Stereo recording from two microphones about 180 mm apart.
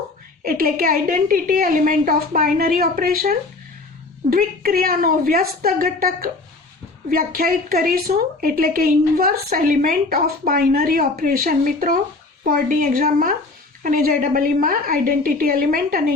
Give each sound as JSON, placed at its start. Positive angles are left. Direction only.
{"t": 0.4, "sound": "a woman's voice", "side_deg": -55}